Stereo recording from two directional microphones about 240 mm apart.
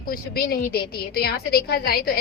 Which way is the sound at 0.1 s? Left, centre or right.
Left.